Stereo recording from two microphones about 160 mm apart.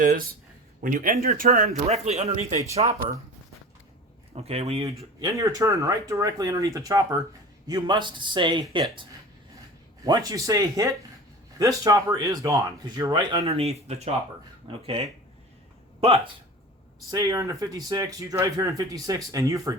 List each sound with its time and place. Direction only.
0.0 s speech: 65° right (ahead or behind)
1.9 s speech: 40° right (ahead or behind)
4.4 s speech: 40° right (ahead or behind)
5.2 s speech: 20° right (ahead or behind)
13.4 s speech: 40° right (ahead or behind)
17.1 s speech: 20° right (ahead or behind)